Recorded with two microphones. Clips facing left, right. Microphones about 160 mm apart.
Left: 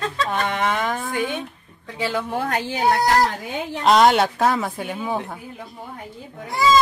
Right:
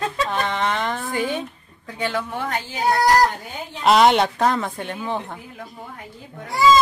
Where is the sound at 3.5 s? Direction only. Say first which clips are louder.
Even; centre (ahead or behind).